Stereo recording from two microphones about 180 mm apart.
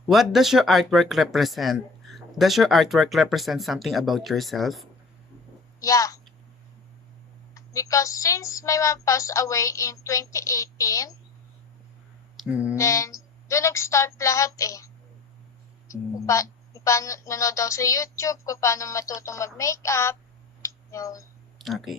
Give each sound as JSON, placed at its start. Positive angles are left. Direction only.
{"t": 0.1, "sound": "speech", "side_deg": 0}
{"t": 5.8, "sound": "a woman's voice", "side_deg": 20}
{"t": 7.5, "sound": "a woman's voice", "side_deg": 20}
{"t": 12.4, "sound": "speech", "side_deg": -5}
{"t": 12.7, "sound": "a woman's voice", "side_deg": 15}
{"t": 15.9, "sound": "a woman's voice", "side_deg": 15}
{"t": 20.6, "sound": "a sound", "side_deg": 15}
{"t": 21.6, "sound": "speech", "side_deg": 0}